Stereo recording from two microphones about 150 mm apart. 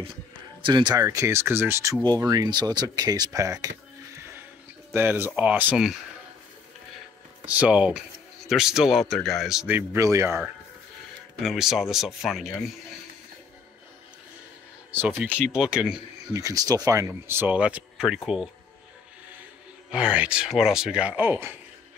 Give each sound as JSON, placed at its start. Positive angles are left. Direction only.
{"t": 0.6, "sound": "speech", "side_deg": -30}
{"t": 7.4, "sound": "speech", "side_deg": -10}
{"t": 11.4, "sound": "speech", "side_deg": 0}
{"t": 14.9, "sound": "speech", "side_deg": -15}
{"t": 16.2, "sound": "speech", "side_deg": -20}
{"t": 19.9, "sound": "speech", "side_deg": -5}